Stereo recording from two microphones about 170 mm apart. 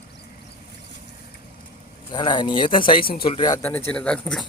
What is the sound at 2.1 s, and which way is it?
Speech, 25° left (ahead or behind).